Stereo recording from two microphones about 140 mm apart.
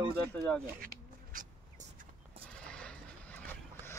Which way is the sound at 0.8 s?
80° right.